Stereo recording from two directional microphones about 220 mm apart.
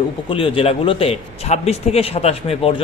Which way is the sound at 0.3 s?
25° left (ahead or behind).